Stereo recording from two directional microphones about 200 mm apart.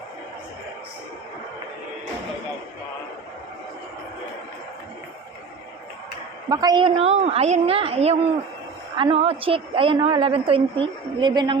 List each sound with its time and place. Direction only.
6.5 s a woman's voice: 20° right (ahead or behind)